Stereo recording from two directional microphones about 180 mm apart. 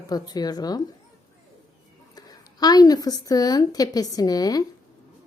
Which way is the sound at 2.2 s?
20° left (ahead or behind).